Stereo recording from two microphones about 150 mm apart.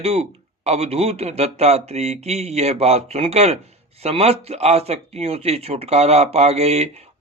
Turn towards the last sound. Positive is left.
turn(degrees=-45)  # may be behind; listen again after turning